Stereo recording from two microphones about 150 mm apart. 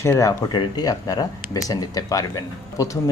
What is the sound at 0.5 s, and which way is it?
Speech, 30° left (ahead or behind).